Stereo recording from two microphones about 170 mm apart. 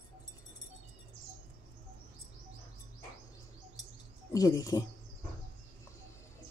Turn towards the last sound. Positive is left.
turn(degrees=20)  # may be behind; listen again after turning